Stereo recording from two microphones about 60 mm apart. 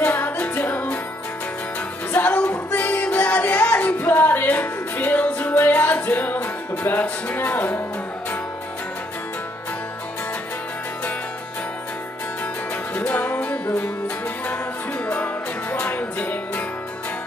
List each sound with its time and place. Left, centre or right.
0.0 s music: left
2.1 s music: left
12.9 s music: left
15.0 s music: left